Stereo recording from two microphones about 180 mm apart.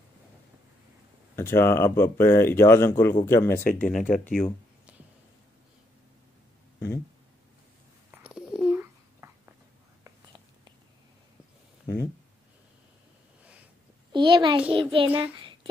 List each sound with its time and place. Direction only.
1.3 s speech: 15° left (ahead or behind)
3.7 s speech: 5° left (ahead or behind)
8.1 s a sound: 5° right (ahead or behind)
10.0 s whispering: 25° right (ahead or behind)
14.1 s a child's voice: 25° right (ahead or behind)
15.3 s a sound: 25° right (ahead or behind)